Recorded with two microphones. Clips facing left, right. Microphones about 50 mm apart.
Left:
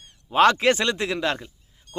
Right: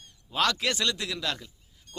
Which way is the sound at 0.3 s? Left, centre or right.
Left.